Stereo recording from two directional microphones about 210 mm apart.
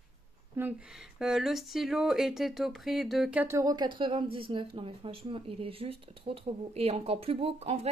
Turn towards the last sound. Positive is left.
turn(degrees=-30)  # may be behind; listen again after turning